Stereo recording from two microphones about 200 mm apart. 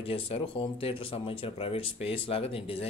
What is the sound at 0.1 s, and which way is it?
Speech, 30° left (ahead or behind).